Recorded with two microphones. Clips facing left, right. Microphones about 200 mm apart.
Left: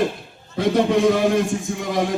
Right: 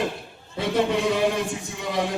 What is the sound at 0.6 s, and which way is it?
Music, 45° left (ahead or behind).